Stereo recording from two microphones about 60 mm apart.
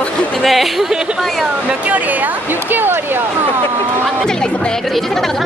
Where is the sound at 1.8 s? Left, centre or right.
Right.